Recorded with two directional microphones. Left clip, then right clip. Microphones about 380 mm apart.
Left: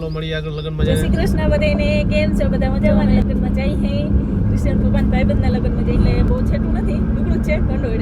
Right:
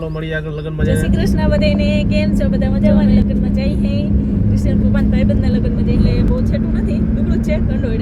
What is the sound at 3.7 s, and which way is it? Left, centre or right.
Speech, centre.